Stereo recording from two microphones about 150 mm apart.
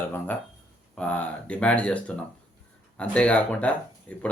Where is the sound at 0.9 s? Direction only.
10° left (ahead or behind).